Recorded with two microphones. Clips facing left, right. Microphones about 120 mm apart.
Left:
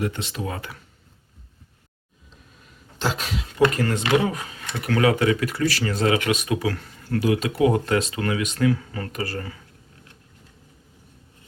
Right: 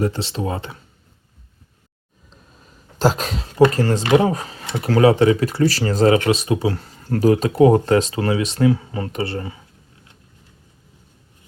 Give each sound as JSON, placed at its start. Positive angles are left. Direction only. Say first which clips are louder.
{"t": 0.0, "sound": "speech", "louder": "right 5 dB", "side_deg": -30}
{"t": 3.0, "sound": "speech", "louder": "right 7 dB", "side_deg": -40}